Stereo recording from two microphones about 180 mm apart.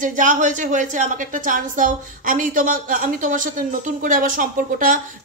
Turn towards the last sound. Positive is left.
turn(degrees=-50)  # may be behind; listen again after turning